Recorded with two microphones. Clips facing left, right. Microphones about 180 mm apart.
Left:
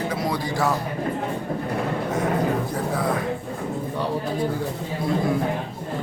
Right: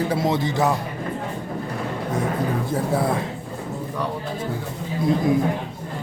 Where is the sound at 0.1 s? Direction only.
25° right (ahead or behind).